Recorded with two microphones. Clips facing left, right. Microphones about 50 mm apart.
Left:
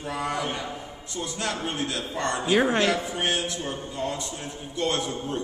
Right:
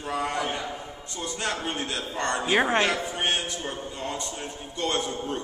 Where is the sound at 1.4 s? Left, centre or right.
Right.